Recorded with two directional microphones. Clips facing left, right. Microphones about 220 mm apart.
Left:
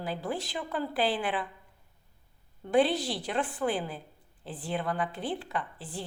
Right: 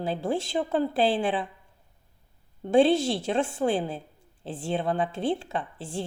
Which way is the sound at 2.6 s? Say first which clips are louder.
Right 5 dB; 25° right (ahead or behind).